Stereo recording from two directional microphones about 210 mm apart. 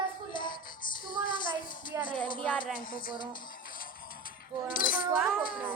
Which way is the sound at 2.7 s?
40° left (ahead or behind).